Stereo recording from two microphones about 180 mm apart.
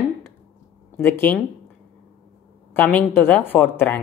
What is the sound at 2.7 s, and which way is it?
Speech, 10° left (ahead or behind).